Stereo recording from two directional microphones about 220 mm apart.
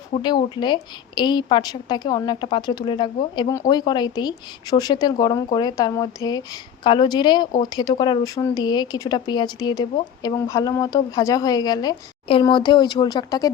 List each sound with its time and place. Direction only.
0.1 s a woman's voice: 20° left (ahead or behind)